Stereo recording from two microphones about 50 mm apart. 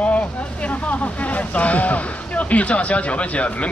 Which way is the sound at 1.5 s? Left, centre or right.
Left.